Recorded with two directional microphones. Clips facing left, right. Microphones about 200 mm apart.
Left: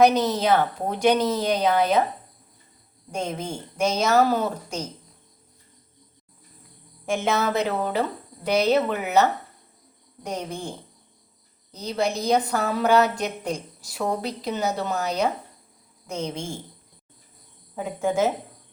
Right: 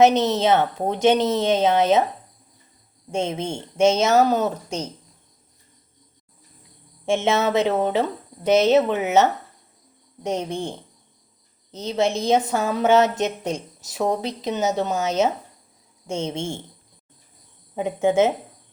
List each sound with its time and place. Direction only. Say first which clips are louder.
0.0 s a woman's voice: right 2 dB; 25° right (ahead or behind)
3.1 s a woman's voice: right 4 dB; 25° right (ahead or behind)
7.0 s a woman's voice: right 3 dB; 25° right (ahead or behind)
11.9 s a woman's voice: right 3 dB; 25° right (ahead or behind)
17.7 s a woman's voice: right 5 dB; 20° right (ahead or behind)